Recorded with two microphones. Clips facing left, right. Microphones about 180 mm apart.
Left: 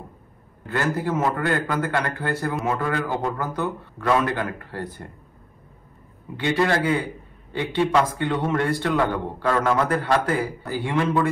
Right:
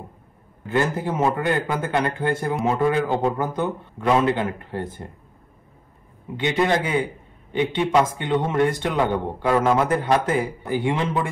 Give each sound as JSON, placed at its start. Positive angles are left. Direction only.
{"t": 0.7, "sound": "a man's voice", "side_deg": -20}
{"t": 6.3, "sound": "a man's voice", "side_deg": -20}